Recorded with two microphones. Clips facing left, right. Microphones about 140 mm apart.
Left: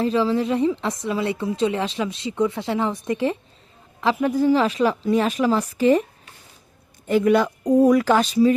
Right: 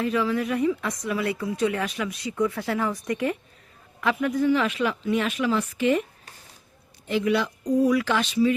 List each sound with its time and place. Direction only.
0.0 s a woman's voice: 30° left (ahead or behind)
7.1 s speech: 45° left (ahead or behind)